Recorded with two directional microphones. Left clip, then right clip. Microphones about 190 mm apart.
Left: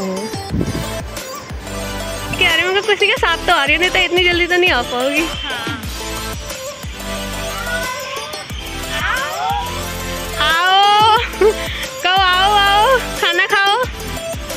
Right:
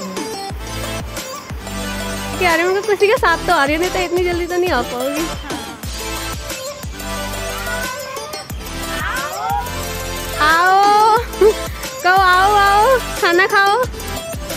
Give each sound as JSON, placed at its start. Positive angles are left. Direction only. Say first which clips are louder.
{"t": 2.4, "sound": "speech", "louder": "left 1 dB", "side_deg": -15}
{"t": 3.0, "sound": "speech", "louder": "right 1 dB", "side_deg": 0}
{"t": 3.3, "sound": "speech", "louder": "even", "side_deg": -15}
{"t": 3.8, "sound": "speech", "louder": "left 4 dB", "side_deg": 0}
{"t": 10.4, "sound": "music", "louder": "right 1 dB", "side_deg": -10}
{"t": 11.1, "sound": "music", "louder": "even", "side_deg": 0}
{"t": 12.0, "sound": "music", "louder": "right 2 dB", "side_deg": -15}
{"t": 12.8, "sound": "music", "louder": "even", "side_deg": 0}